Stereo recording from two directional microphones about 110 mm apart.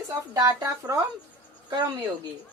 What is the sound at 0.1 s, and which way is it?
Speech, 30° right (ahead or behind).